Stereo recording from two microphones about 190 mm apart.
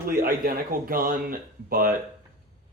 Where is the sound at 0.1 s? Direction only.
50° right (ahead or behind).